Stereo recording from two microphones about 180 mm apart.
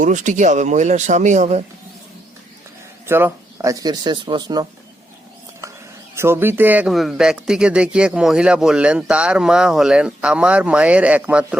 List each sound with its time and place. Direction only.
0.0 s speech: 45° right (ahead or behind)
3.1 s speech: 10° right (ahead or behind)
6.1 s speech: 15° right (ahead or behind)